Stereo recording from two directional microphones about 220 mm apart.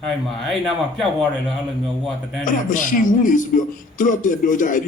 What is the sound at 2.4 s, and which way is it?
A man's voice, 35° left (ahead or behind).